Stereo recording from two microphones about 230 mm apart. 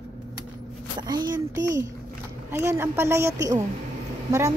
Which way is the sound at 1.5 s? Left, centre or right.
Right.